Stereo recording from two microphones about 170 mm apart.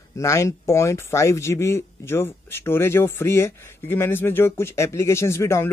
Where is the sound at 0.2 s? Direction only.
20° left (ahead or behind).